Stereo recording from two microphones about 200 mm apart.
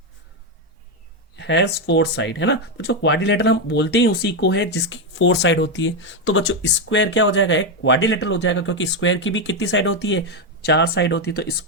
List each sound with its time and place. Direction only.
1.4 s speech: 60° left (ahead or behind)